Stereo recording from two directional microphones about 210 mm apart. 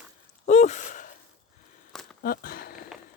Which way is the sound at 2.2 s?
45° left (ahead or behind).